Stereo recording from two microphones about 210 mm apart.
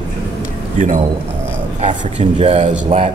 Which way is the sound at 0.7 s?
35° right (ahead or behind).